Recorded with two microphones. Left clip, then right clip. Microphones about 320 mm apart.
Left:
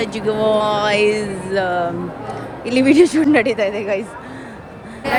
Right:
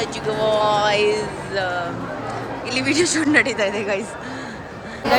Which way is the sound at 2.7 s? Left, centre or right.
Centre.